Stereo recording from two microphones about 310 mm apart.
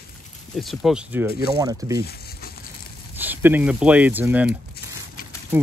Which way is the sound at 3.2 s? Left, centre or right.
Centre.